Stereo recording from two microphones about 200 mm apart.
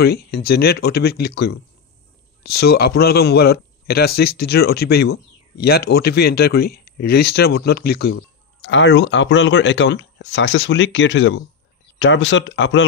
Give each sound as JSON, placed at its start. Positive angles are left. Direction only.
{"t": 0.0, "sound": "a man's voice", "side_deg": 55}
{"t": 8.2, "sound": "speech", "side_deg": 65}